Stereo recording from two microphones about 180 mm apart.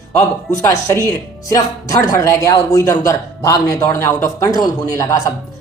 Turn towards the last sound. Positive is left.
turn(degrees=20)  # may be behind; listen again after turning